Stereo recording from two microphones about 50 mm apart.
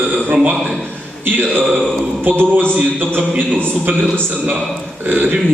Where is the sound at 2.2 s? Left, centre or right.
Right.